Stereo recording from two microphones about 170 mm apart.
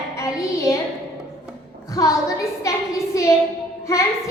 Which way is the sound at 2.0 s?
20° left (ahead or behind).